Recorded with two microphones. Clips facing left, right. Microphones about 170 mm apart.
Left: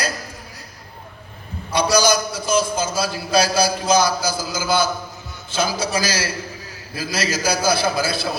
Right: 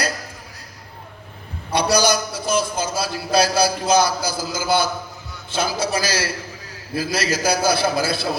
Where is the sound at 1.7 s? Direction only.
60° right (ahead or behind).